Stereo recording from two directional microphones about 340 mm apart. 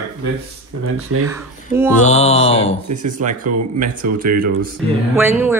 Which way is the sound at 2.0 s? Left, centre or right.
Centre.